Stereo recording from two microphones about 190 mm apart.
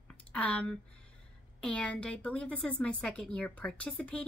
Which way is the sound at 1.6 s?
5° left (ahead or behind).